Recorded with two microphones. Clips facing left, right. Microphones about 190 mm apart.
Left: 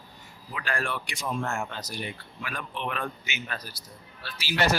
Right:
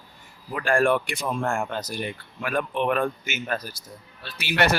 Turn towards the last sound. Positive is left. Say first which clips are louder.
# right 3 dB
turn(degrees=-65)  # may be behind; listen again after turning